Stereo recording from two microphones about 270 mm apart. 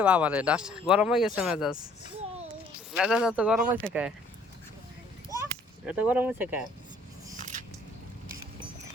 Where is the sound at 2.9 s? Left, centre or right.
Centre.